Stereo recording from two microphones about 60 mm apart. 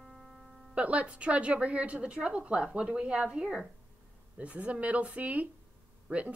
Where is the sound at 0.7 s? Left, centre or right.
Right.